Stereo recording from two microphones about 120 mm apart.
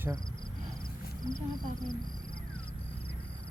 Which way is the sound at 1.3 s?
40° left (ahead or behind).